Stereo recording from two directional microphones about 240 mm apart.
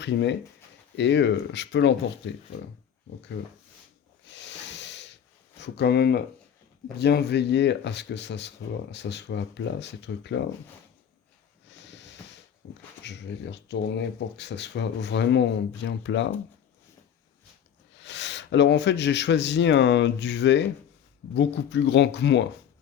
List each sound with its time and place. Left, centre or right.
0.0 s speech: left
4.3 s hiss: left
5.5 s speech: left
11.7 s hiss: left
12.6 s speech: left
17.9 s speech: left